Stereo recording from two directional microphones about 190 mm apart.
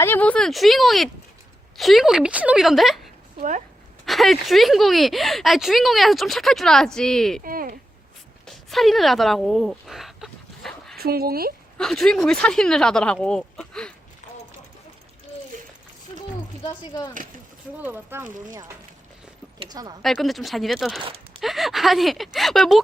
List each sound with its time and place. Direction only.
0.0 s speech: 10° left (ahead or behind)
7.4 s speech: 50° right (ahead or behind)
8.4 s a sound: centre (ahead or behind)
10.9 s speech: 55° right (ahead or behind)
11.8 s speech: centre (ahead or behind)
16.6 s speech: 20° left (ahead or behind)
17.7 s speech: 10° right (ahead or behind)
19.5 s a sound: 20° right (ahead or behind)
20.0 s speech: centre (ahead or behind)